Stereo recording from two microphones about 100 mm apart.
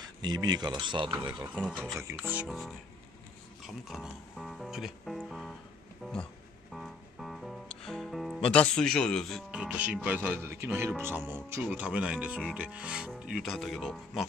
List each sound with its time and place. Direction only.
0.0 s speech: 45° right (ahead or behind)
2.0 s speech: 30° right (ahead or behind)
2.4 s speech: centre (ahead or behind)
6.7 s music: centre (ahead or behind)
8.4 s speech: 10° left (ahead or behind)
9.5 s speech: 10° right (ahead or behind)
11.8 s speech: 10° right (ahead or behind)